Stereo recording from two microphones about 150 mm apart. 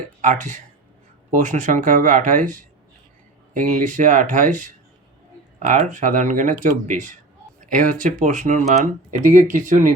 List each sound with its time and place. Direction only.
0.2 s speech: 55° right (ahead or behind)